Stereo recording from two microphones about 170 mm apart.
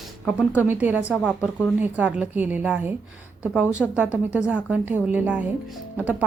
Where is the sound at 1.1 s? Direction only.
Centre (ahead or behind).